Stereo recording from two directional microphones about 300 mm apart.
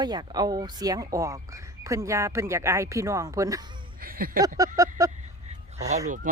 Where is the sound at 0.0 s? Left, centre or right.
Centre.